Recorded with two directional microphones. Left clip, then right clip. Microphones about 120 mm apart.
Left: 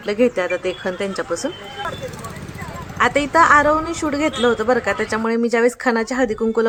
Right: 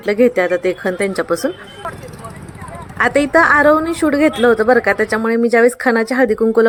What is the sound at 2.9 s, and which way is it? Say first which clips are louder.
A woman's voice: right 2 dB; 30° right (ahead or behind).